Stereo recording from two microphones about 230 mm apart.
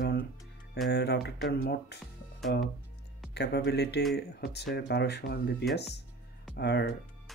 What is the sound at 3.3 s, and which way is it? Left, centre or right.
Speech, left.